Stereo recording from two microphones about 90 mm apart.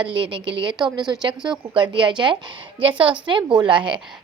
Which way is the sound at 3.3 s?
55° right (ahead or behind).